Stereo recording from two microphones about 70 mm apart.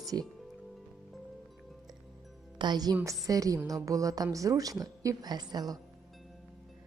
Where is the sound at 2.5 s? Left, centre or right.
Right.